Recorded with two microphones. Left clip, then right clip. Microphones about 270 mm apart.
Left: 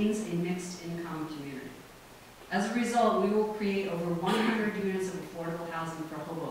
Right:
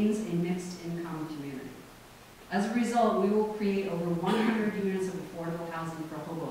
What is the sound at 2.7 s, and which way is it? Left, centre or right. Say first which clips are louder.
A man's voice: even; centre.